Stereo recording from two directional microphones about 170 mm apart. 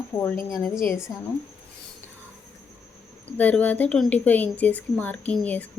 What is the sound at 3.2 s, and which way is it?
Speech, 10° left (ahead or behind).